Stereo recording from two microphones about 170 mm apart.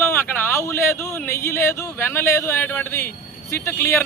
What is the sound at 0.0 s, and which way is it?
Speech, 15° left (ahead or behind).